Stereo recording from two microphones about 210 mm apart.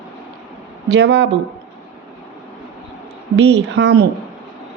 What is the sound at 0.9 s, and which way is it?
Speech, 55° right (ahead or behind).